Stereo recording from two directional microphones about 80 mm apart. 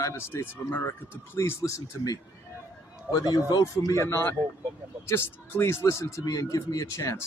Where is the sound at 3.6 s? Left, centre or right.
Left.